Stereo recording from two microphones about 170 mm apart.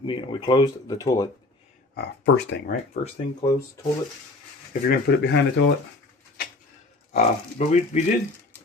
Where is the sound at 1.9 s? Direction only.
80° left.